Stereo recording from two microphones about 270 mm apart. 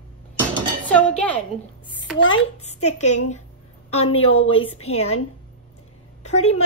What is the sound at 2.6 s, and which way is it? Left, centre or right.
Speech, left.